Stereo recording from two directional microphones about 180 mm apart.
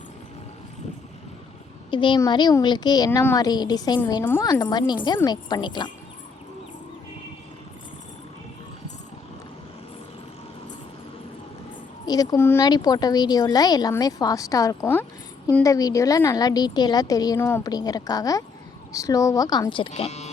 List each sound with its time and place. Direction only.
1.9 s a woman's voice: 25° left (ahead or behind)
12.0 s a woman's voice: 20° left (ahead or behind); by 20.3 s 35° left (ahead or behind)